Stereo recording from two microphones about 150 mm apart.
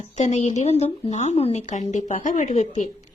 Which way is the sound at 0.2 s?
50° left (ahead or behind).